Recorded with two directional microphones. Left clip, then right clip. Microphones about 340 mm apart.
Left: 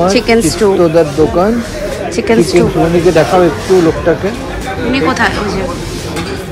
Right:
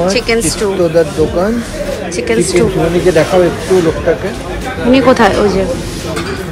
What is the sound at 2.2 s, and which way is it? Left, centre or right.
Speech, centre.